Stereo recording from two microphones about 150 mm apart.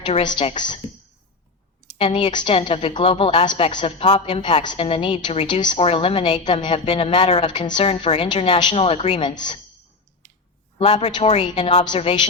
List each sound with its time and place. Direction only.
0.0 s a woman's voice: 30° left (ahead or behind)
2.0 s a woman's voice: 35° left (ahead or behind)
10.8 s a woman's voice: 40° left (ahead or behind)